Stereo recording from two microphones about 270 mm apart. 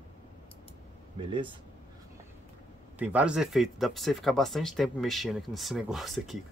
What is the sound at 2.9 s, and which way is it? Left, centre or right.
Speech, centre.